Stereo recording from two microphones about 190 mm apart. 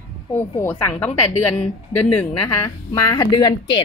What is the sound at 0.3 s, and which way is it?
A woman's voice, 10° left (ahead or behind).